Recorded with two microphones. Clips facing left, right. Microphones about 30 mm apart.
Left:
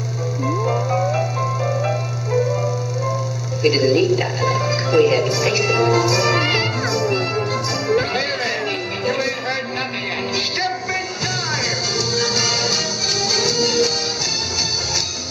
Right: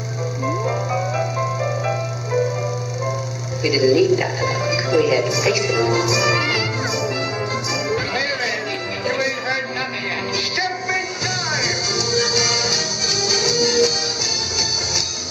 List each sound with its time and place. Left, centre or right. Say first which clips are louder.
0.5 s music: left 2 dB; centre
3.6 s speech: even; centre
7.9 s music: left 5 dB; centre
12.1 s music: right 2 dB; centre